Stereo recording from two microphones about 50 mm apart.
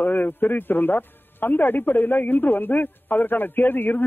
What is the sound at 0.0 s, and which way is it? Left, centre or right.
A man's voice, left.